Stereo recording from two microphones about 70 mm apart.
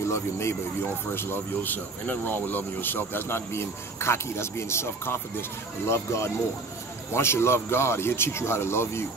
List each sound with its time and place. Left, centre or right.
0.1 s speech: left